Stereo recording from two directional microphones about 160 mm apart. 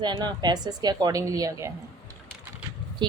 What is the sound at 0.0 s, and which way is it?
A woman's voice, 25° right (ahead or behind).